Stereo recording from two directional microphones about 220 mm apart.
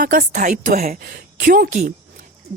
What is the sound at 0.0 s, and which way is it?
A woman's voice, 40° right (ahead or behind).